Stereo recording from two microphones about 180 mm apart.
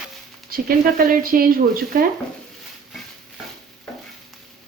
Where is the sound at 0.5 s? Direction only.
55° right (ahead or behind).